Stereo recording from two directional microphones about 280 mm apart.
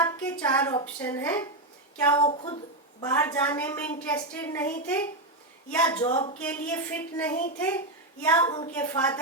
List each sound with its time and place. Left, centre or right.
0.0 s a woman's voice: centre